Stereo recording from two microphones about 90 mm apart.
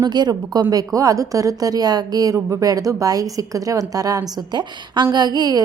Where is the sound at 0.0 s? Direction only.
50° right (ahead or behind).